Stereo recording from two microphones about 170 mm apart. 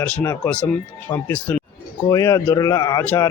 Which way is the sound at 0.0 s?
10° left (ahead or behind).